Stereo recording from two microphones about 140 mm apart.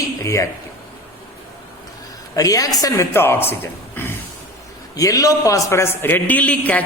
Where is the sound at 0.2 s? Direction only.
20° left (ahead or behind).